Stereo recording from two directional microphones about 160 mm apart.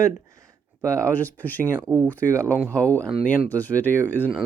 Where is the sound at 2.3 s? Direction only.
15° right (ahead or behind).